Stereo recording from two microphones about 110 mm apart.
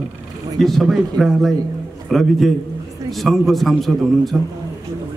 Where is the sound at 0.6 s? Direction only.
Centre (ahead or behind).